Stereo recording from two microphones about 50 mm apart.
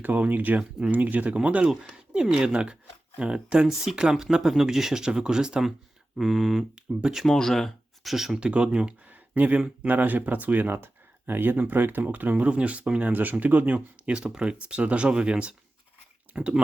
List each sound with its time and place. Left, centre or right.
0.0 s speech: right
2.3 s speech: centre
6.1 s speech: centre
6.7 s speech: centre
7.3 s speech: centre
8.1 s speech: centre
8.4 s speech: right
9.0 s a sound: right
9.8 s speech: right
10.7 s speech: right
12.5 s speech: right
14.1 s speech: centre